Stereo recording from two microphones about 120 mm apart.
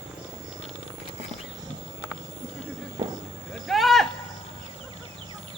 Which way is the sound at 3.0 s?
35° right (ahead or behind).